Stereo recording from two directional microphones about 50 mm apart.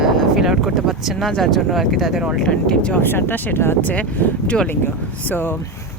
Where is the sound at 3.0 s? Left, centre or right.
Left.